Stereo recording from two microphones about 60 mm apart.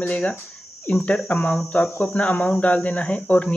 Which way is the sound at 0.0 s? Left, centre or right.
Left.